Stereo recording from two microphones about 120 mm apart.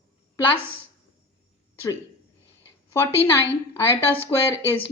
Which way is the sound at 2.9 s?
20° left (ahead or behind).